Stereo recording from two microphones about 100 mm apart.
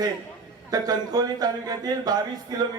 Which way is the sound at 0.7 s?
40° right (ahead or behind).